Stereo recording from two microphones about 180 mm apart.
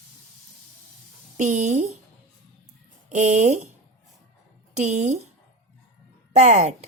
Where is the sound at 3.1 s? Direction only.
40° right (ahead or behind).